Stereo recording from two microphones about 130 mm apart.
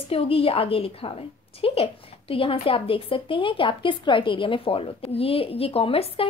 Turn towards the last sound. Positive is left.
turn(degrees=45)  # may be behind; listen again after turning